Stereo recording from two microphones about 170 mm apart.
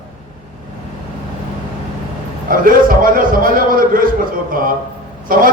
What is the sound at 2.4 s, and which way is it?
A man's voice, 55° right (ahead or behind).